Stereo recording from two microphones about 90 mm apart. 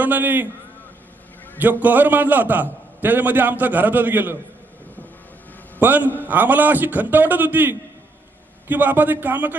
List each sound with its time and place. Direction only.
0.0 s a man's voice: 20° right (ahead or behind)
1.5 s a man's voice: 20° right (ahead or behind)
5.8 s a man's voice: 20° right (ahead or behind)